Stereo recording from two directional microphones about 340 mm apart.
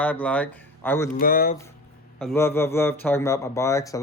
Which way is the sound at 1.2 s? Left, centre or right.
Left.